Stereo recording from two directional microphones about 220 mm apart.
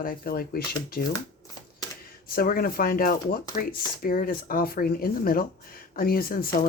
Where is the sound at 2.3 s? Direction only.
40° left (ahead or behind).